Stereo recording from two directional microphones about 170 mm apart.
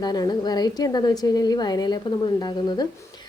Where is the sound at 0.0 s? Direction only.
25° left (ahead or behind).